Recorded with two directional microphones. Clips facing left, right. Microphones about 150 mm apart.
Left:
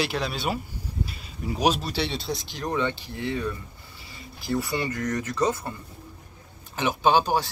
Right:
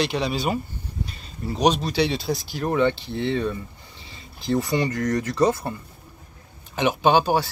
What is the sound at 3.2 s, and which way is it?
Speech, 25° right (ahead or behind).